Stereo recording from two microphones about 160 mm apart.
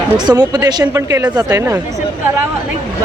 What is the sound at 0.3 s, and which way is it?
Speech, 25° right (ahead or behind).